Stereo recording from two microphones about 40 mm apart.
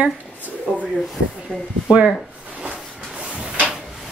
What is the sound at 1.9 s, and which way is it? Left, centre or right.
Speech, right.